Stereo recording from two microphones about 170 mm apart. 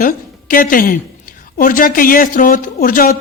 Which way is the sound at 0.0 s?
55° left (ahead or behind).